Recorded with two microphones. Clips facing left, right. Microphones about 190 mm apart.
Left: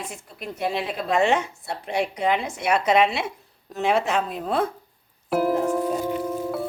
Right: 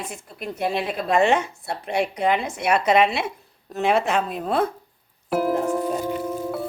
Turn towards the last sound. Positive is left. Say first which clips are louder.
# even
turn(degrees=0)  # may be behind; listen again after turning